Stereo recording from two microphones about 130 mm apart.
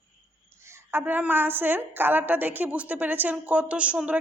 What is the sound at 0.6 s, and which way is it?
A woman's voice, 20° right (ahead or behind).